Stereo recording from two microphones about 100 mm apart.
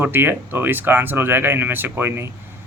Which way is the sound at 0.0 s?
20° right (ahead or behind).